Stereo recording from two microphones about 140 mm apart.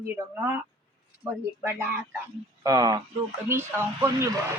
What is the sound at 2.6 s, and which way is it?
A man's voice, 25° right (ahead or behind).